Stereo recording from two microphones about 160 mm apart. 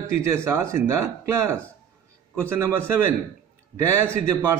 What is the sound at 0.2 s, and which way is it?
A man's voice, 20° right (ahead or behind).